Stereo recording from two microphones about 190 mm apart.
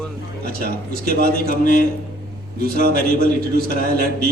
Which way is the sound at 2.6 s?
55° right (ahead or behind).